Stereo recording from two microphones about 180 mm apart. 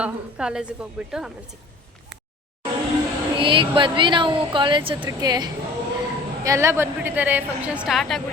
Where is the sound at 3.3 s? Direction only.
30° right (ahead or behind).